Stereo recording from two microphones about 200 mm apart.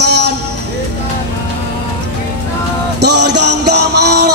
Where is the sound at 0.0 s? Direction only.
55° right (ahead or behind).